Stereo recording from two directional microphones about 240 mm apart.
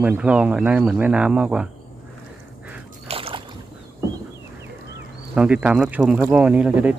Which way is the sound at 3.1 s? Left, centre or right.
Right.